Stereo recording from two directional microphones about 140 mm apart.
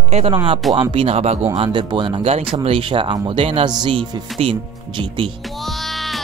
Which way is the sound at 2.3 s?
50° right (ahead or behind).